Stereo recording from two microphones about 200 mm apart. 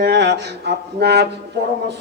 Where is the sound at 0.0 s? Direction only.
55° right (ahead or behind).